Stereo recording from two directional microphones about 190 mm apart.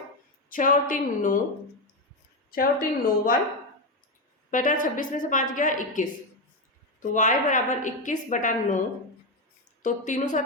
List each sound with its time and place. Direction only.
0.5 s a woman's voice: 45° left (ahead or behind)
2.5 s a woman's voice: 50° left (ahead or behind)
4.5 s a woman's voice: 45° left (ahead or behind)
7.1 s a woman's voice: 40° left (ahead or behind)
9.8 s speech: 40° left (ahead or behind)